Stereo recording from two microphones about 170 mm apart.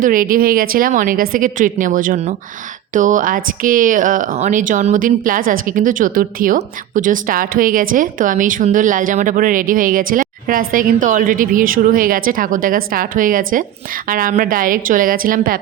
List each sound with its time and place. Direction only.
0.0 s a woman's voice: 55° right (ahead or behind)